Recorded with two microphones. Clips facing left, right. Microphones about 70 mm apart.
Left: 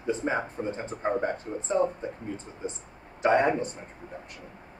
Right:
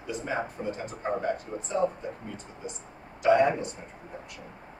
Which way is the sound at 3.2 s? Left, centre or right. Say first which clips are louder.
Right 1 dB; left.